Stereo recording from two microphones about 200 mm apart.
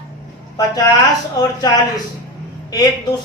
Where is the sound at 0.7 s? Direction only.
20° left (ahead or behind).